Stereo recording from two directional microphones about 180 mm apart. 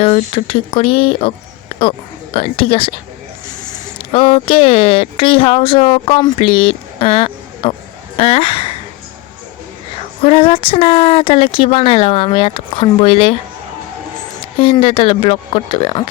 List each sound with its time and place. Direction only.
0.0 s speech: 30° left (ahead or behind)
2.3 s speech: 30° left (ahead or behind)
4.1 s speech: 30° left (ahead or behind)
10.2 s speech: 30° left (ahead or behind)
14.6 s speech: 30° left (ahead or behind)